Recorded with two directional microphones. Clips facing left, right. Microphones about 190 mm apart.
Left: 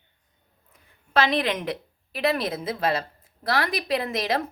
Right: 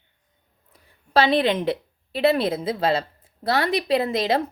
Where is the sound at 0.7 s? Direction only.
30° right (ahead or behind).